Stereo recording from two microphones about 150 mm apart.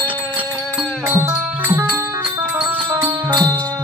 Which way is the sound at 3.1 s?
25° right (ahead or behind).